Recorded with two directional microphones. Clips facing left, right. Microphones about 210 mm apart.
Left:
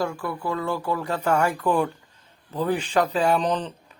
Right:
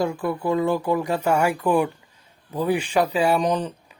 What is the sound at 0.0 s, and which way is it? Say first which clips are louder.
Speech: right 4 dB; 20° right (ahead or behind).